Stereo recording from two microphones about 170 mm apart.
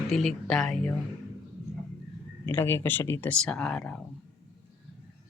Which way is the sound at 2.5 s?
15° left (ahead or behind).